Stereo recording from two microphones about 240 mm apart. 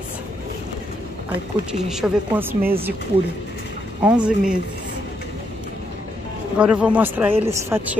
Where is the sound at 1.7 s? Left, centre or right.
Centre.